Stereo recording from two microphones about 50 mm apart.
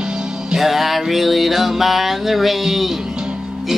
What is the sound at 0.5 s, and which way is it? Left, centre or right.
Music, centre.